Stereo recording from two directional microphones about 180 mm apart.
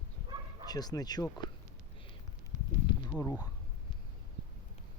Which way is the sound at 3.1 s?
15° left (ahead or behind).